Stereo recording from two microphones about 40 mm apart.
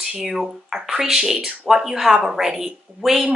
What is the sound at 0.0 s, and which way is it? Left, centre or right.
Speech, centre.